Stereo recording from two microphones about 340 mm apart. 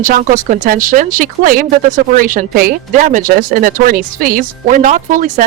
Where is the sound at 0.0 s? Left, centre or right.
Right.